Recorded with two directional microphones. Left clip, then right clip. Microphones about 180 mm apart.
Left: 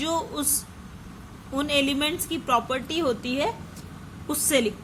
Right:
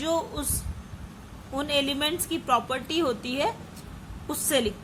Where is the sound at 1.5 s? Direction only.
15° left (ahead or behind).